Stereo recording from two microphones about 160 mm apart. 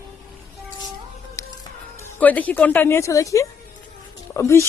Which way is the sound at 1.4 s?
20° left (ahead or behind).